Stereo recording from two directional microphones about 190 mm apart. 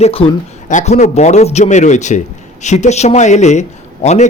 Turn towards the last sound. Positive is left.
turn(degrees=35)  # may be behind; listen again after turning